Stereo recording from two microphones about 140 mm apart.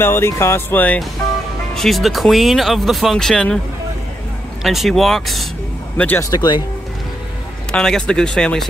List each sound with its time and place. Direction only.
0.0 s speech: 15° left (ahead or behind)
1.8 s speech: centre (ahead or behind)
4.6 s speech: centre (ahead or behind)
5.9 s speech: 15° left (ahead or behind)
6.3 s speech: 30° left (ahead or behind)
7.7 s speech: 5° left (ahead or behind)